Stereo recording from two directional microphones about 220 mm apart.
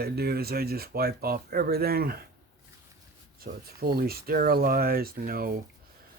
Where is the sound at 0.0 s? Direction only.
45° right (ahead or behind).